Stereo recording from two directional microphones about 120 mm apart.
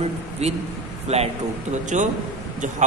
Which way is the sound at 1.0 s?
60° right (ahead or behind).